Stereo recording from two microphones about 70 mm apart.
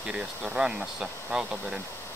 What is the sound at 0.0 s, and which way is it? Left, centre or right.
Speech, centre.